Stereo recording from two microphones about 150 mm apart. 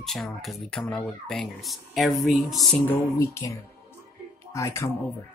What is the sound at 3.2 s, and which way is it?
Speech, 20° left (ahead or behind).